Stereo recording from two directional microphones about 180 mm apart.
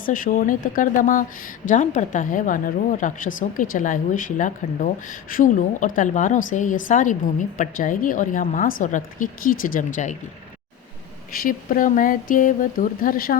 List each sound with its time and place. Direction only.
0.0 s speech: 50° left (ahead or behind)
11.3 s speech: 50° left (ahead or behind)